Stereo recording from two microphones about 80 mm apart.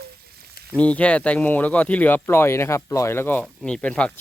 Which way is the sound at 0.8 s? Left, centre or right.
Centre.